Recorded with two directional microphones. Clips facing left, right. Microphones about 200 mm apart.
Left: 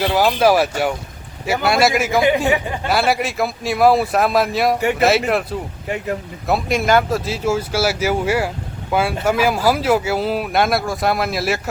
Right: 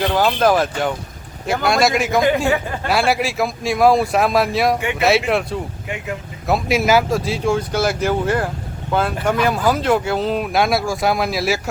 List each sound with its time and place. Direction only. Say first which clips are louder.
0.0 s speech: left 1 dB; 10° left (ahead or behind)
2.2 s speech: left 1 dB; 20° left (ahead or behind)
2.8 s speech: right 1 dB; centre (ahead or behind)